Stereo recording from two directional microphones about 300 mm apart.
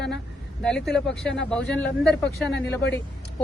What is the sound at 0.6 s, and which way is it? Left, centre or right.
Speech, centre.